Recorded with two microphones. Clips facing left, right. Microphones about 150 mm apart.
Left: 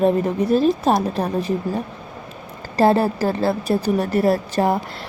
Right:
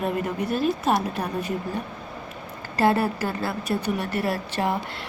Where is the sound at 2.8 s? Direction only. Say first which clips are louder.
Left 5 dB; 35° left (ahead or behind).